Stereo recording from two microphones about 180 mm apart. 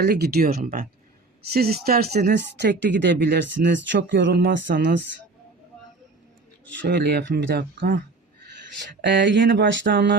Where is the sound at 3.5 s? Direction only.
85° right.